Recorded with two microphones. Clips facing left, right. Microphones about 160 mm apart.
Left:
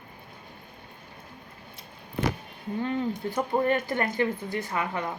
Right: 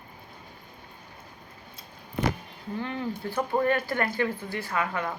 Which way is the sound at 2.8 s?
20° left (ahead or behind).